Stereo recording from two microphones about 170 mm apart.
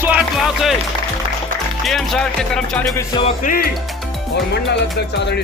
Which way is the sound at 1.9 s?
Centre (ahead or behind).